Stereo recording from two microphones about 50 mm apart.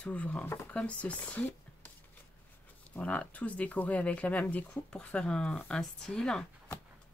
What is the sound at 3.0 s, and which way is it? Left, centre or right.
Speech, left.